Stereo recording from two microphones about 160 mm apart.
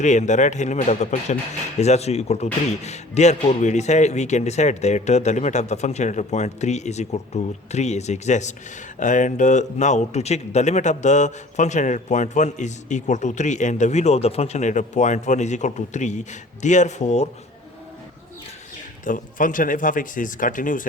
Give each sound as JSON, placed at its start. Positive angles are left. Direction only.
{"t": 0.0, "sound": "speech", "side_deg": 50}
{"t": 19.0, "sound": "speech", "side_deg": 55}